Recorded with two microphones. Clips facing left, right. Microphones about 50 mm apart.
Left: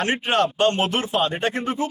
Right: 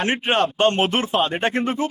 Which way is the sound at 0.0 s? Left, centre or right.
Right.